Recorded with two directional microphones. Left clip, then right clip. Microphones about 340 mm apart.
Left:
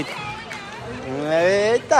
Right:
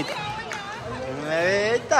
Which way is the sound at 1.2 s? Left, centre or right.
Centre.